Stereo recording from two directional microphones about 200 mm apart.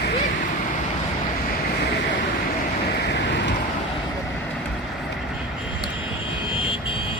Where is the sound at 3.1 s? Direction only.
60° left (ahead or behind).